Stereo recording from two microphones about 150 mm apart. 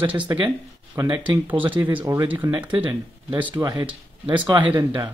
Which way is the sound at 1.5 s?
10° right (ahead or behind).